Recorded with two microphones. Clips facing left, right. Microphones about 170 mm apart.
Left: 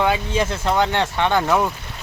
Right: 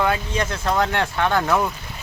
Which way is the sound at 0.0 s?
5° left (ahead or behind).